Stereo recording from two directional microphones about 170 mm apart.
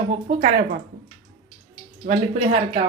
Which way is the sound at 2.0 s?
45° right (ahead or behind).